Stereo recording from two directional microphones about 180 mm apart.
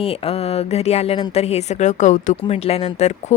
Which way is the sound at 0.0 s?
35° left (ahead or behind).